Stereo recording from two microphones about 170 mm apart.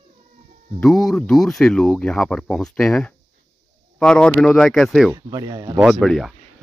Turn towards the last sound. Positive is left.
turn(degrees=0)  # may be behind; listen again after turning